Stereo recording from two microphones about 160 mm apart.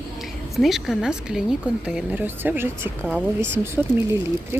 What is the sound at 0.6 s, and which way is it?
Speech, centre (ahead or behind).